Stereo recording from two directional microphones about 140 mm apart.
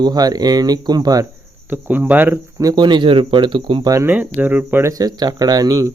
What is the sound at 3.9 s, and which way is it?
Speech, 15° right (ahead or behind).